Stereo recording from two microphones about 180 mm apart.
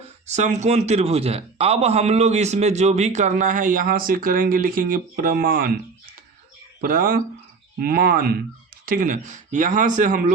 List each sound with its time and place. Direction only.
0.3 s a man's voice: 40° right (ahead or behind)
6.8 s speech: 55° right (ahead or behind)